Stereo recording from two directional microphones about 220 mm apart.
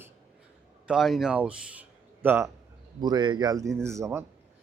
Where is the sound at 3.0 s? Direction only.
20° right (ahead or behind).